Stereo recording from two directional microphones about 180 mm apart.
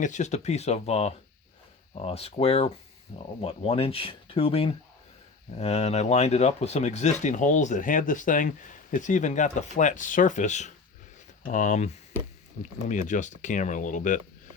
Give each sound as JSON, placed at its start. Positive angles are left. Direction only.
{"t": 0.0, "sound": "speech", "side_deg": 40}